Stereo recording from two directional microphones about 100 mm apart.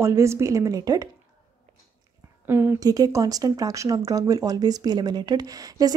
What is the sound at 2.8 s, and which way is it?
Speech, 40° right (ahead or behind).